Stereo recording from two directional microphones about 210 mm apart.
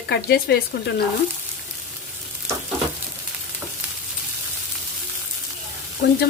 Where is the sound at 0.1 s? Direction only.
50° left (ahead or behind).